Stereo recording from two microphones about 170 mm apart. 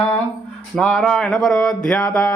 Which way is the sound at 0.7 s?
Centre (ahead or behind).